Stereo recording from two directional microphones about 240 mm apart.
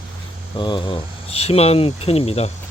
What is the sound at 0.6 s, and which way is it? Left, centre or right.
Speech, centre.